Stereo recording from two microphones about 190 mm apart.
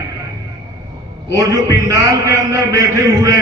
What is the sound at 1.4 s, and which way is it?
A man's voice, 15° right (ahead or behind).